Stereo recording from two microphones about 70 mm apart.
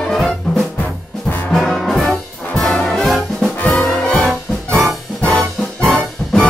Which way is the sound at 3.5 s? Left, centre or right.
Centre.